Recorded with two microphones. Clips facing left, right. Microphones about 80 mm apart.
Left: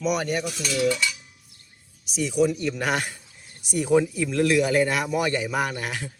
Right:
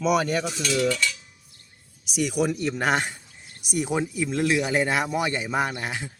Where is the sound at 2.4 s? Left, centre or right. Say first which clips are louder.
Even; right.